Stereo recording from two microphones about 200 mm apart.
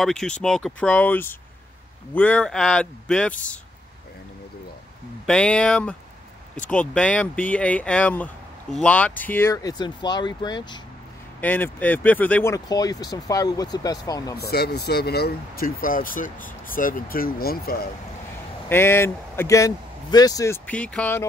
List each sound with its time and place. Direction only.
0.0 s speech: 5° left (ahead or behind)
5.2 s speech: 5° left (ahead or behind); by 10.8 s 20° left (ahead or behind)
11.4 s speech: 10° left (ahead or behind)
14.3 s speech: 50° left (ahead or behind)
18.7 s speech: 10° left (ahead or behind)